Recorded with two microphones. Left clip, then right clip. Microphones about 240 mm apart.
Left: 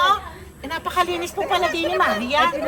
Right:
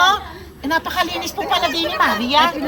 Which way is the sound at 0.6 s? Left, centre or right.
Centre.